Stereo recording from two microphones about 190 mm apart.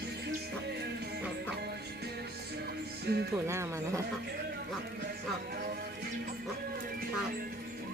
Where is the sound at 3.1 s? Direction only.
60° right (ahead or behind).